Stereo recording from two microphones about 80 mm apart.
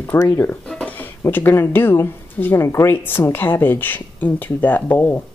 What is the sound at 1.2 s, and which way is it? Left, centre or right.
Speech, left.